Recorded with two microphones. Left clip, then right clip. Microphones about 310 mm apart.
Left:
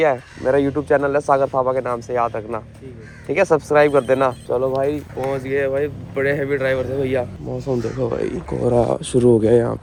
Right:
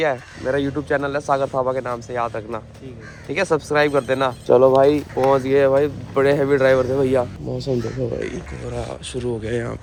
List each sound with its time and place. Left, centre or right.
0.0 s speech: centre
4.4 s speech: right
7.4 s speech: centre